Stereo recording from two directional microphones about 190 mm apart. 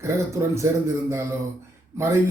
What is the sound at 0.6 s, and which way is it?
Speech, 15° right (ahead or behind).